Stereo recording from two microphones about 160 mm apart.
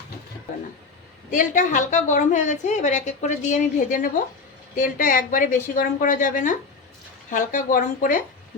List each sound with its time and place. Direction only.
1.3 s a woman's voice: 55° left (ahead or behind)